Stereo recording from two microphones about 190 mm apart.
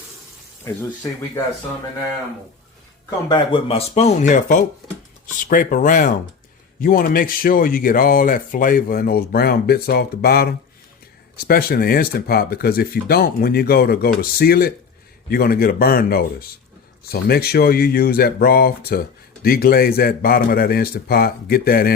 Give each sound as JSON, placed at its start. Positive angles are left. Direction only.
{"t": 3.2, "sound": "speech", "side_deg": 25}